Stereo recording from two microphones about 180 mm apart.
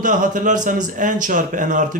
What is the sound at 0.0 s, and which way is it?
A man's voice, 45° right (ahead or behind).